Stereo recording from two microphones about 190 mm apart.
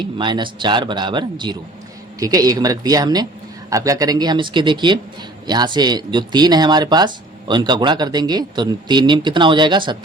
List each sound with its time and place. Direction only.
0.0 s speech: 25° right (ahead or behind)